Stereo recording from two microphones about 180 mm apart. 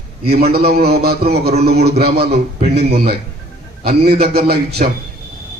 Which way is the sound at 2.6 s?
35° right (ahead or behind).